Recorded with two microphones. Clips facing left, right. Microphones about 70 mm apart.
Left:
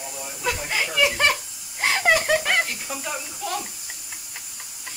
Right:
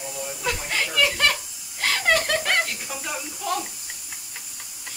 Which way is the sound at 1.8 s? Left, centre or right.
Left.